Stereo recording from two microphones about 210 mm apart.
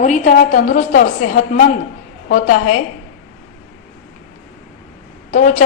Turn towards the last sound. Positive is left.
turn(degrees=35)  # may be behind; listen again after turning